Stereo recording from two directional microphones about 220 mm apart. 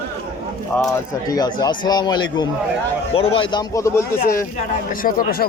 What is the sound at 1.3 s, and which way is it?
Speech, 15° left (ahead or behind).